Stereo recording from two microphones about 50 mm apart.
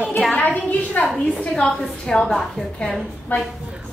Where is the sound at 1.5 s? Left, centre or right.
Centre.